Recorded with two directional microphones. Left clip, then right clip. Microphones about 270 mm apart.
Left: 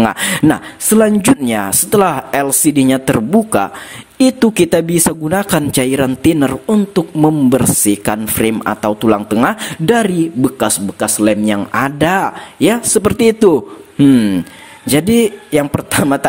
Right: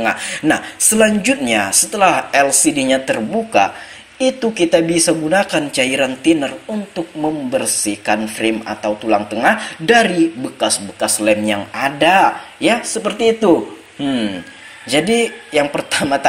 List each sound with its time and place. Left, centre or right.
0.0 s speech: left